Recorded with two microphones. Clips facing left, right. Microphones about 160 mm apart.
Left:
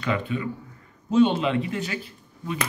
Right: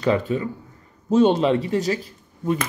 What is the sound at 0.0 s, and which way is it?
Speech, 40° right (ahead or behind).